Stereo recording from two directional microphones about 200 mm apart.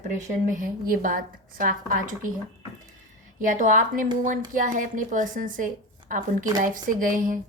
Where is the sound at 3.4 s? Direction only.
40° right (ahead or behind).